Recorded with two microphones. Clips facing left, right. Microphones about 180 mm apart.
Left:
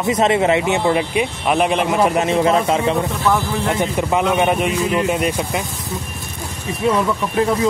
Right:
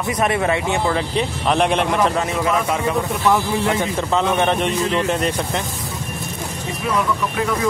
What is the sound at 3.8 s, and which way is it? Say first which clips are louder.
Speech: left 2 dB; 15° left (ahead or behind).